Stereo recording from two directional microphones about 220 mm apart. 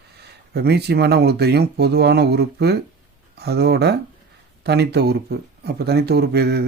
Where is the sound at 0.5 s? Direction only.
45° right (ahead or behind).